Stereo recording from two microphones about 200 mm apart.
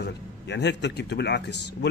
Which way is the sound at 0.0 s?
60° left (ahead or behind).